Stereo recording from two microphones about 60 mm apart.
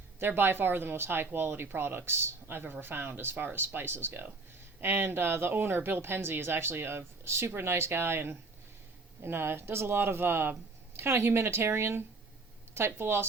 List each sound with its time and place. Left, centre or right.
0.2 s speech: right